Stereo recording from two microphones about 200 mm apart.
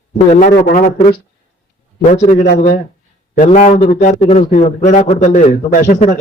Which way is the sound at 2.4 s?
35° left (ahead or behind).